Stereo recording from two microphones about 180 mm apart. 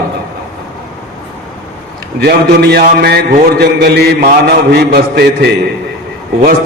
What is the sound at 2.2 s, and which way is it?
A man's voice, 60° right (ahead or behind).